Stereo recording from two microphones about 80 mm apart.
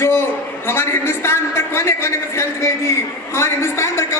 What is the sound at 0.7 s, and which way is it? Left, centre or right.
A man's voice, left.